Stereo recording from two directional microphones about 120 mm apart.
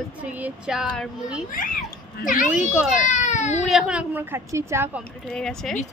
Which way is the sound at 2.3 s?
90° left.